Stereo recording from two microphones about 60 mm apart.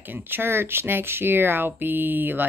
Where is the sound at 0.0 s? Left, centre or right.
Right.